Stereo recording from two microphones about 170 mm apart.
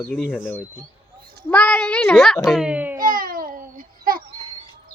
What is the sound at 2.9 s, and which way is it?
Babbling, 55° right (ahead or behind).